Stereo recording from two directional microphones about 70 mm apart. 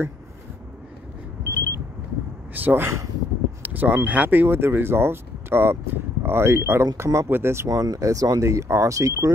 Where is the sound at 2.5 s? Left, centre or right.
Right.